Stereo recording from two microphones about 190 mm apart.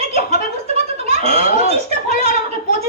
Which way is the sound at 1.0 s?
35° right (ahead or behind).